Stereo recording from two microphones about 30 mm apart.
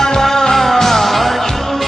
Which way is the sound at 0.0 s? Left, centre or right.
Centre.